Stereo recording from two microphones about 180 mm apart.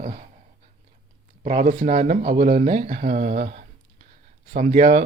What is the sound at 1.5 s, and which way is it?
Speech, 40° right (ahead or behind).